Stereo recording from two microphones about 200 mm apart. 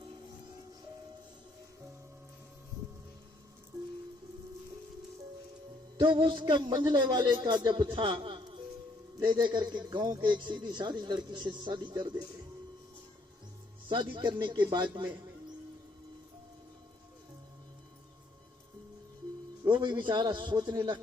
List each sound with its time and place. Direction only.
6.0 s a man's voice: 25° right (ahead or behind)
13.8 s a man's voice: 25° right (ahead or behind)
19.7 s a man's voice: 25° right (ahead or behind)